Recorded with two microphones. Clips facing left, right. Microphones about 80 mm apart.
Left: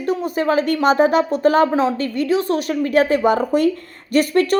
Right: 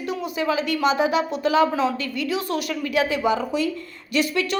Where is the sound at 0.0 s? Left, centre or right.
Left.